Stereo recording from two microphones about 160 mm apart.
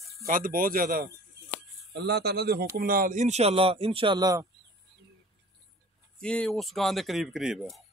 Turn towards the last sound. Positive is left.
turn(degrees=0)  # may be behind; listen again after turning